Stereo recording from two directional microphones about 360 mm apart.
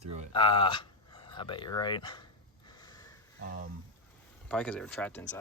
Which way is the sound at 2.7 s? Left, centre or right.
Centre.